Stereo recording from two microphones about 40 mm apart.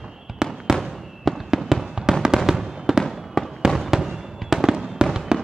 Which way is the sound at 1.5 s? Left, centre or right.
Centre.